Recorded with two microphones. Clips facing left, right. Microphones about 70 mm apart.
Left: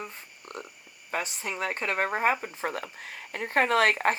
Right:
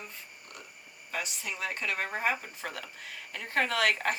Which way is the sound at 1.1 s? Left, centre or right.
Left.